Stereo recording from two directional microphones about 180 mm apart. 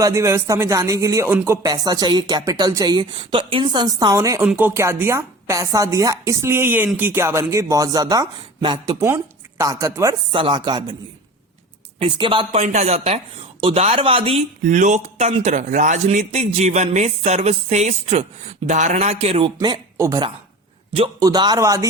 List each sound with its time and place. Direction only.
0.0 s speech: 15° right (ahead or behind)
11.9 s speech: 25° right (ahead or behind)
19.5 s speech: 20° right (ahead or behind)